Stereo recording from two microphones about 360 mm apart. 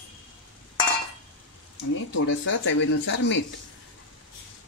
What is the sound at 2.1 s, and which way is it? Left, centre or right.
Speech, left.